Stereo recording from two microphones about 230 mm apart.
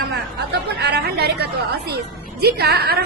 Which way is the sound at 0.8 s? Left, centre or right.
Right.